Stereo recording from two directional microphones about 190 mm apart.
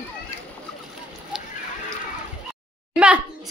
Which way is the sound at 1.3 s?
5° right (ahead or behind).